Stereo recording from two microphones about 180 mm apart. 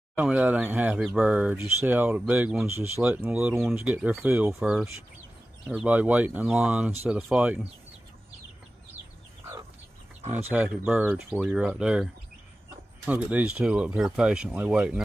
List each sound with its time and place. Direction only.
0.1 s speech: 10° right (ahead or behind)
10.3 s speech: 10° right (ahead or behind)